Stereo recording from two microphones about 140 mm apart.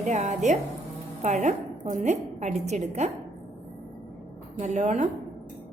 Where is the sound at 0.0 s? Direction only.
55° right (ahead or behind).